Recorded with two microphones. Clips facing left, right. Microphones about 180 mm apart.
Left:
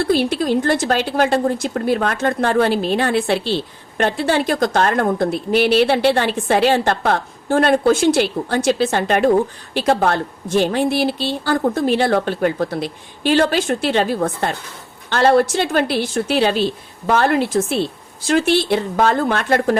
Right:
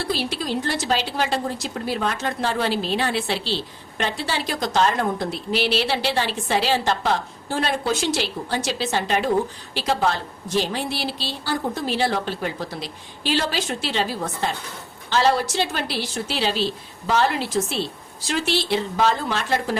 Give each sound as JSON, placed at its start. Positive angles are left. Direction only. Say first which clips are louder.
{"t": 0.0, "sound": "a woman's voice", "louder": "left 9 dB", "side_deg": 55}